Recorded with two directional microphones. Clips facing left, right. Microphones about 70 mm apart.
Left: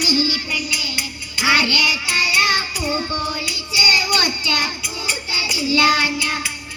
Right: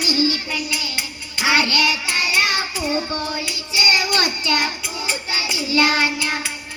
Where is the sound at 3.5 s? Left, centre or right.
Right.